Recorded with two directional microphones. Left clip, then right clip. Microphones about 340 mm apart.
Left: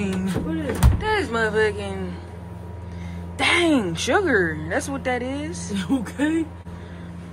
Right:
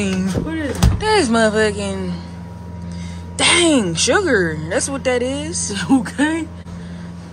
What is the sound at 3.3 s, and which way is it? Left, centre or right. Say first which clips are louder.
Speech: right 5 dB; centre.